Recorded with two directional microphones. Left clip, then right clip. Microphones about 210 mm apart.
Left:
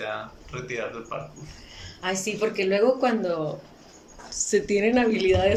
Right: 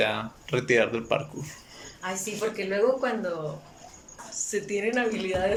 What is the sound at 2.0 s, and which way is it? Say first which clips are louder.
Speech: left 4 dB; 10° left (ahead or behind).